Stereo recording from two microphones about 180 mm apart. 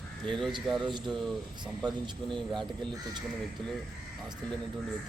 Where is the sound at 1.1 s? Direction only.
Centre (ahead or behind).